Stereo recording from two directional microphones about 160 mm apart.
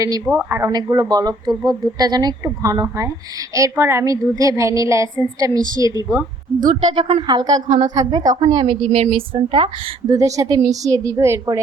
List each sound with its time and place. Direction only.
0.3 s speech: 10° right (ahead or behind)
6.6 s a woman's voice: 55° right (ahead or behind)
7.0 s speech: 30° right (ahead or behind)
7.7 s a woman's voice: 50° right (ahead or behind)
7.9 s speech: 25° right (ahead or behind)
8.4 s a woman's voice: 35° right (ahead or behind); by 11.6 s 15° right (ahead or behind)